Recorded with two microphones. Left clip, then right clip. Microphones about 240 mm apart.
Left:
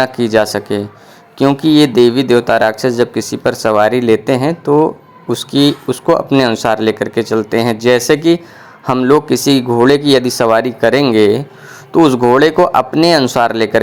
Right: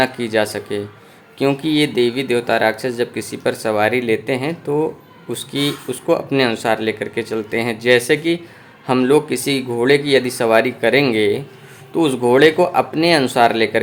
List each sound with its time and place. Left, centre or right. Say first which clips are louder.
0.0 s speech: left 5 dB; left